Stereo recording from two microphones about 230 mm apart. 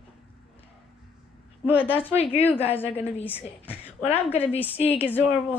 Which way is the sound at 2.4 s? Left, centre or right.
Centre.